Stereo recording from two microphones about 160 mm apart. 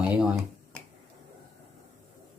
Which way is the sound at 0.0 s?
10° right (ahead or behind).